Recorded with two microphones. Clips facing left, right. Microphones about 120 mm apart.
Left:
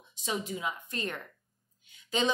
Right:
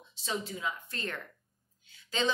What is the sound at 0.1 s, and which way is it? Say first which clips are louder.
A woman's voice: left 2 dB; 15° left (ahead or behind).